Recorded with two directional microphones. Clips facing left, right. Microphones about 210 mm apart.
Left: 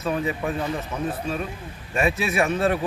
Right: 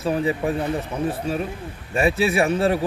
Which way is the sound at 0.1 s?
30° right (ahead or behind).